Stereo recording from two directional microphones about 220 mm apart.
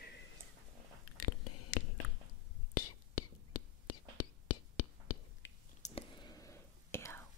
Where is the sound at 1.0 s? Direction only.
90° left.